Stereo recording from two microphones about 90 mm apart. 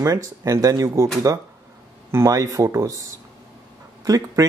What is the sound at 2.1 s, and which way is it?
Speech, 35° right (ahead or behind).